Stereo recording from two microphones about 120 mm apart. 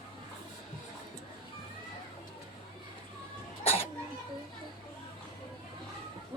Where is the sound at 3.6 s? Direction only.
60° left (ahead or behind).